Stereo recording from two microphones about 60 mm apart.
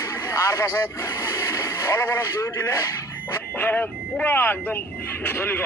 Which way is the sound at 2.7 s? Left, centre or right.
Left.